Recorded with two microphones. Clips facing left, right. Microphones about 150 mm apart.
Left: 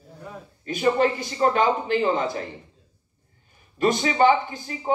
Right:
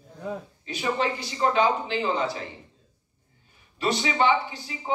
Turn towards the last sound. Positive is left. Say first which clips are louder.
# left 5 dB
turn(degrees=45)  # may be behind; listen again after turning